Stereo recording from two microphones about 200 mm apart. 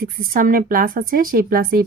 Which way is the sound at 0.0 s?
45° right (ahead or behind).